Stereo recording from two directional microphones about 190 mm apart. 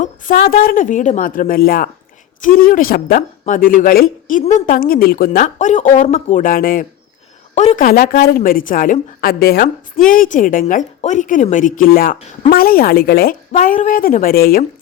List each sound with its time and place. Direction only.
0.0 s a woman's voice: 40° left (ahead or behind)
7.5 s a woman's voice: 35° left (ahead or behind)